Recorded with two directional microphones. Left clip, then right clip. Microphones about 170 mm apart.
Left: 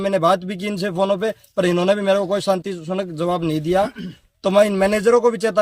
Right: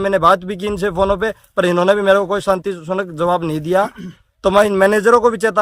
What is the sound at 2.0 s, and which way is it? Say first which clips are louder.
Speech: right 4 dB; 30° right (ahead or behind).